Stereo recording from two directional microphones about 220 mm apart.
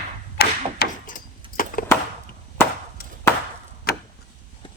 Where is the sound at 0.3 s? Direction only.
40° left (ahead or behind).